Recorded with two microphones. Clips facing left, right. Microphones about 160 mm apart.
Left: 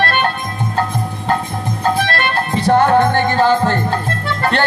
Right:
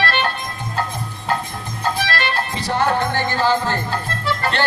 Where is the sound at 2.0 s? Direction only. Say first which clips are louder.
Left 4 dB; 50° left (ahead or behind).